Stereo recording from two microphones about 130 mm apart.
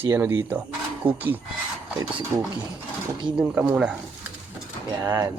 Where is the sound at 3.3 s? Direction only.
15° right (ahead or behind).